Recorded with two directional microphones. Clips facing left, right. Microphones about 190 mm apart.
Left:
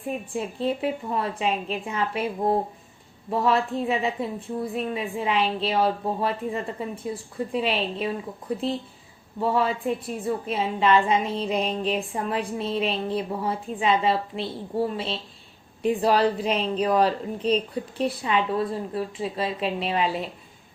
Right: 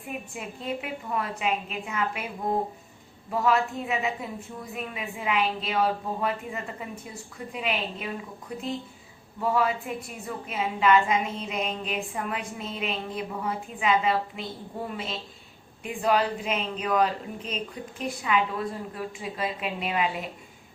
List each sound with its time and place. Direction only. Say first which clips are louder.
0.3 s a woman's voice: left 7 dB; 30° left (ahead or behind)
3.2 s a woman's voice: left 2 dB; 30° left (ahead or behind)